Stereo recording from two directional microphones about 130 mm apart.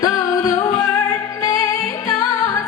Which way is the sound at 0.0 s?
30° left (ahead or behind).